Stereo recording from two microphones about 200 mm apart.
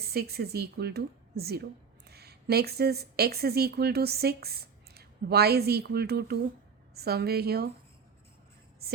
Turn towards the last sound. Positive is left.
turn(degrees=-50)  # may be behind; listen again after turning